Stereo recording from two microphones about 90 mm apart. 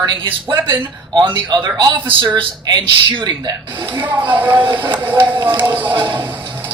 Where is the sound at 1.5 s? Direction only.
50° right (ahead or behind).